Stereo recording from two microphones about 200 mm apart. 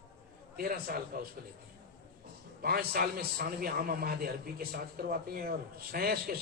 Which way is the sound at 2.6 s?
50° right (ahead or behind).